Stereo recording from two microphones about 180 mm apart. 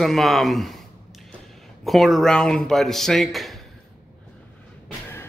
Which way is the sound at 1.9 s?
Centre (ahead or behind).